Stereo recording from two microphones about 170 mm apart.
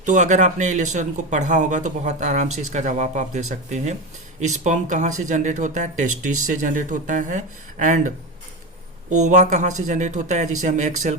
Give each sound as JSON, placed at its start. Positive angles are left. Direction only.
{"t": 0.0, "sound": "speech", "side_deg": -45}